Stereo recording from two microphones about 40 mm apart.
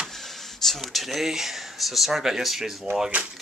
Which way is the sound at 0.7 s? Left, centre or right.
Centre.